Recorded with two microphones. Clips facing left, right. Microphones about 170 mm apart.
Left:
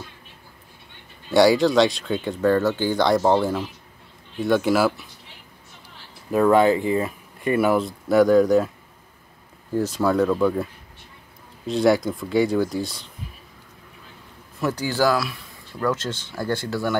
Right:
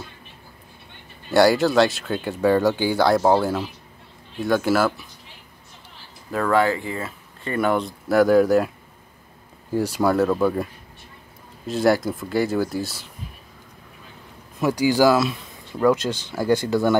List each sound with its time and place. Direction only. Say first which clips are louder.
1.3 s speech: even; centre (ahead or behind)
6.3 s speech: left 4 dB; 20° left (ahead or behind); by 8.7 s 5° right (ahead or behind)
9.8 s speech: right 1 dB; 10° right (ahead or behind)
14.6 s speech: right 4 dB; 15° right (ahead or behind)